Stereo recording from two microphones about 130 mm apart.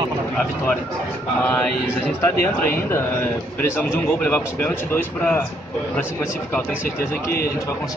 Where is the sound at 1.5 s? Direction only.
10° left (ahead or behind).